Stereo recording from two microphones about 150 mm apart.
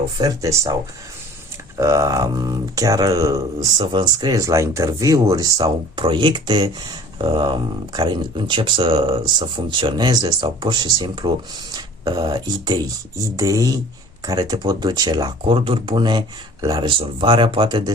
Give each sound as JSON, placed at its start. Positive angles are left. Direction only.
{"t": 0.2, "sound": "speech", "side_deg": -25}
{"t": 1.8, "sound": "speech", "side_deg": -20}